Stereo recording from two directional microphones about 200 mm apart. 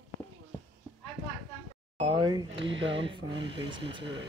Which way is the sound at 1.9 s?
25° right (ahead or behind).